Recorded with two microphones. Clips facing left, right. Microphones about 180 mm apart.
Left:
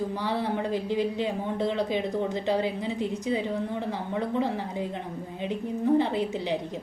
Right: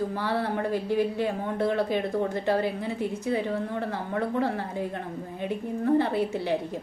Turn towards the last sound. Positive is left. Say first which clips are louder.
# right 1 dB
turn(degrees=15)  # may be behind; listen again after turning